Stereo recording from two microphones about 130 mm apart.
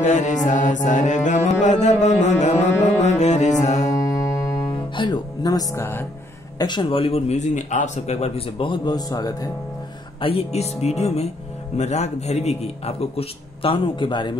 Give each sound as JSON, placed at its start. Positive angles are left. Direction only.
{"t": 0.0, "sound": "speech", "side_deg": 65}
{"t": 3.0, "sound": "music", "side_deg": 60}
{"t": 3.8, "sound": "music", "side_deg": 25}
{"t": 6.6, "sound": "a man's voice", "side_deg": 35}
{"t": 10.2, "sound": "speech", "side_deg": 50}